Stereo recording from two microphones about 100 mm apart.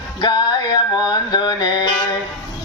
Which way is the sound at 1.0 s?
45° left (ahead or behind).